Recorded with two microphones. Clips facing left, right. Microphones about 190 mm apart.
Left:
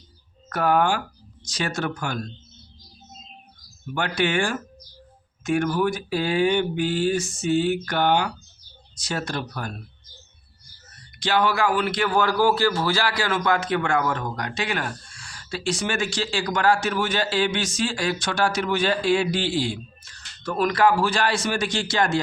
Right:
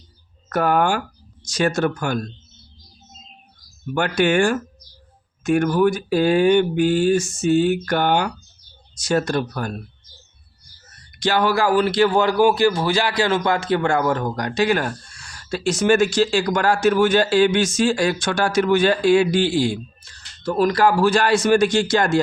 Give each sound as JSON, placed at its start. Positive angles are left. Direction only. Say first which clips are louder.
{"t": 0.5, "sound": "a man's voice", "louder": "right 2 dB", "side_deg": -50}
{"t": 3.9, "sound": "a man's voice", "louder": "right 6 dB", "side_deg": -50}
{"t": 11.2, "sound": "a man's voice", "louder": "right 3 dB", "side_deg": -45}
{"t": 20.0, "sound": "a man's voice", "louder": "even", "side_deg": -30}